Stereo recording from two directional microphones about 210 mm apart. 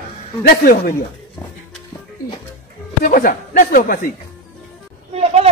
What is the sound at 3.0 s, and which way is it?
Speech, 40° left (ahead or behind).